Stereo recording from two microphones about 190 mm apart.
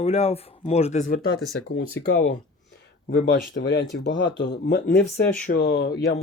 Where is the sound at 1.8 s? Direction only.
65° left (ahead or behind).